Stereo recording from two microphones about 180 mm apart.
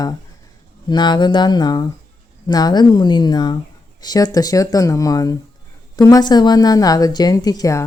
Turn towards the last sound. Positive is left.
turn(degrees=20)  # may be behind; listen again after turning